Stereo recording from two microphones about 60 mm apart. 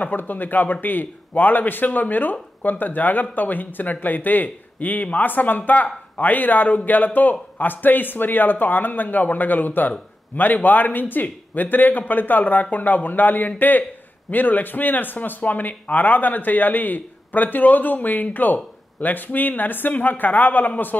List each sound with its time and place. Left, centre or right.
0.0 s a man's voice: left